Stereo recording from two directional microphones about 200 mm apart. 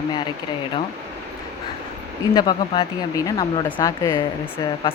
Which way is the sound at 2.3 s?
20° left (ahead or behind).